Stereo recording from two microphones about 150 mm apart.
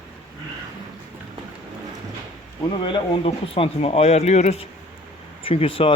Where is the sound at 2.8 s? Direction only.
35° left (ahead or behind).